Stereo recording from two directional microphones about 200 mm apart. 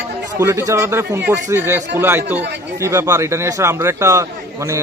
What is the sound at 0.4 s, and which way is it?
A man's voice, 15° right (ahead or behind).